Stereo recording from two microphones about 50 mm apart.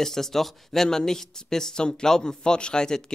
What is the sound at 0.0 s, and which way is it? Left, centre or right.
Speech, centre.